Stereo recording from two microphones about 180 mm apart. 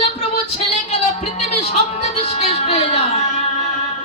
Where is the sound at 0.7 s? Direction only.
35° left (ahead or behind).